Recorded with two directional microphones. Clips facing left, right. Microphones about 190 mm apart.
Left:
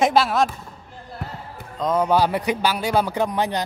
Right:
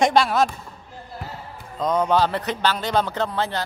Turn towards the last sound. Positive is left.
turn(degrees=15)  # may be behind; listen again after turning